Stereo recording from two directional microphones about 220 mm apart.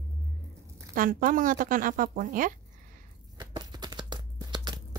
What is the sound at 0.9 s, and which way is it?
A woman's voice, 40° right (ahead or behind).